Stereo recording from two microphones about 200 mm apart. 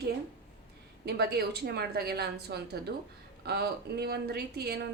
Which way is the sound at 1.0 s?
50° right (ahead or behind).